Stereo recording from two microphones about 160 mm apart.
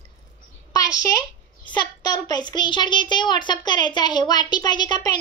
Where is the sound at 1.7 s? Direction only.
25° left (ahead or behind).